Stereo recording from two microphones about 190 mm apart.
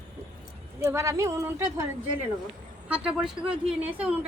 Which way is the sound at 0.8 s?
15° right (ahead or behind).